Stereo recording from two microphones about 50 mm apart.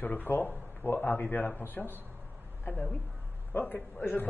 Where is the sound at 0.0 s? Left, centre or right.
Left.